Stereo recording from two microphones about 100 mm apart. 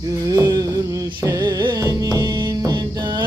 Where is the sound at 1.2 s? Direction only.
35° right (ahead or behind).